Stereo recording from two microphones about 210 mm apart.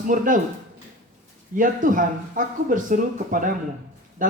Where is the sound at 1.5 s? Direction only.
40° right (ahead or behind).